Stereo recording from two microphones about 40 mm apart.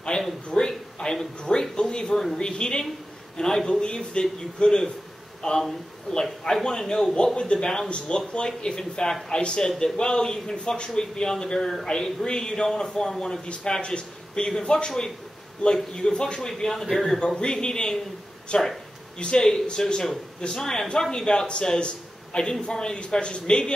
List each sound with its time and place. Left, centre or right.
0.1 s a sound: centre
0.5 s a man's voice: centre
13.5 s a man's voice: left
14.9 s a man's voice: centre
17.4 s a man's voice: left